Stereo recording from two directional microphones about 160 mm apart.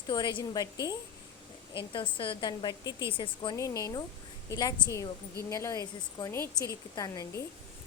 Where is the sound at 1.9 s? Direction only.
30° left (ahead or behind).